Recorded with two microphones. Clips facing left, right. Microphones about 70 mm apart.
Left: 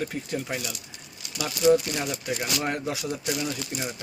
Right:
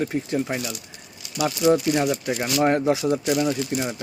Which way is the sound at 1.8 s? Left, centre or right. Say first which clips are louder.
Right 8 dB; centre.